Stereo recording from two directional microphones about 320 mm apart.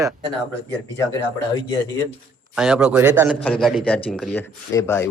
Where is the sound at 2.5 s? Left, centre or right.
Centre.